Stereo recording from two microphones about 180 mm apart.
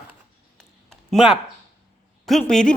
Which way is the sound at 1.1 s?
5° right (ahead or behind).